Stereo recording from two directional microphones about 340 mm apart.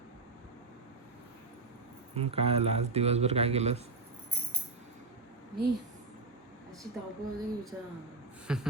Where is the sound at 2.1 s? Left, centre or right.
Centre.